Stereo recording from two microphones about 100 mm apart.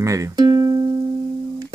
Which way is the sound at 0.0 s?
30° right (ahead or behind).